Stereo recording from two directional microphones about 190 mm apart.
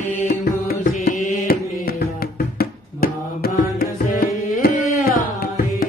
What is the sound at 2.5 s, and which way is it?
Music, 50° left (ahead or behind).